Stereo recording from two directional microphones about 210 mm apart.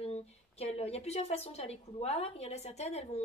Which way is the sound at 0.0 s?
30° left (ahead or behind).